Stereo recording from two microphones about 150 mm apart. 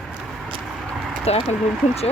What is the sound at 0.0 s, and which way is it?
Vehicle, centre (ahead or behind).